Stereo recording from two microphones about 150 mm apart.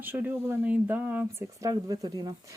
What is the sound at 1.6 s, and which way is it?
Speech, 25° right (ahead or behind).